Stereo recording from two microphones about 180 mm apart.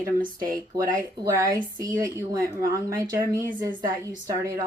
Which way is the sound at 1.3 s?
20° right (ahead or behind).